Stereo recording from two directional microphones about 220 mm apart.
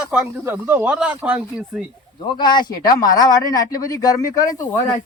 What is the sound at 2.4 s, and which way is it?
Speech, 20° left (ahead or behind).